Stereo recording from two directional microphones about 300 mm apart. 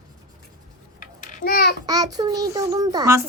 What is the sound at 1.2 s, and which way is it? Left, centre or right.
Babbling, left.